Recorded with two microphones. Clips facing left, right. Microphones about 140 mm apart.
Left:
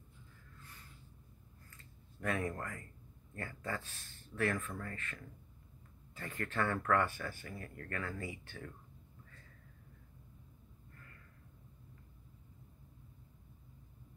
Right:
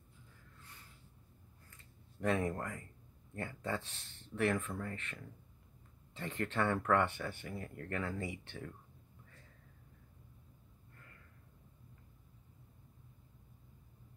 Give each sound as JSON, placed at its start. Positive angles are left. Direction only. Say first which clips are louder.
{"t": 2.1, "sound": "speech", "louder": "right 3 dB", "side_deg": -25}